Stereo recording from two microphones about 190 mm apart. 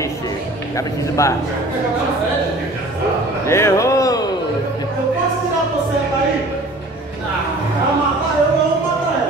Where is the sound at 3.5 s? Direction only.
15° left (ahead or behind).